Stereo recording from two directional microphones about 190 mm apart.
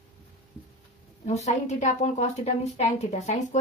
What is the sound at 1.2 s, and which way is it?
A woman's voice, 35° left (ahead or behind).